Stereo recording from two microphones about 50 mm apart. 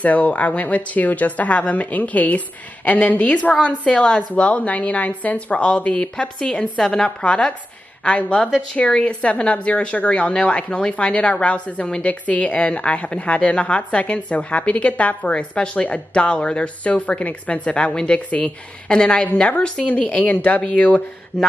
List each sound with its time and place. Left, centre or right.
0.0 s a woman's voice: left
8.7 s a woman's voice: left